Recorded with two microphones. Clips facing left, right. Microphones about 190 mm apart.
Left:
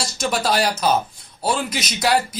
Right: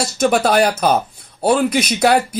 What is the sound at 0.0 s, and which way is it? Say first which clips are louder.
Speech: right 7 dB; 55° right (ahead or behind).